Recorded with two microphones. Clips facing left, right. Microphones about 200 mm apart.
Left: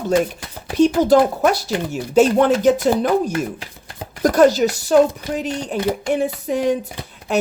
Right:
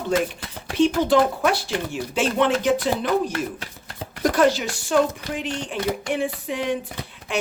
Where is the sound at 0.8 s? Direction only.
40° left (ahead or behind).